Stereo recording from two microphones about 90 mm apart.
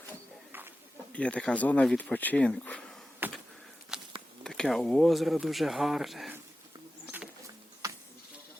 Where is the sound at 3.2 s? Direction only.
20° right (ahead or behind).